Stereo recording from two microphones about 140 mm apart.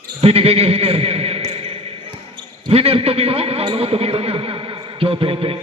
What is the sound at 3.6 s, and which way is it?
A man's voice, 45° right (ahead or behind).